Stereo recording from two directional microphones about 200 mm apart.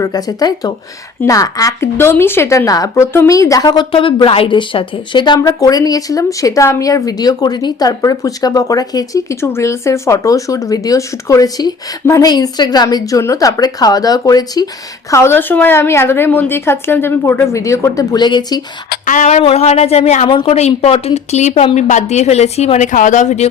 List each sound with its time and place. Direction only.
0.0 s speech: 20° left (ahead or behind)
18.9 s speech: 40° left (ahead or behind)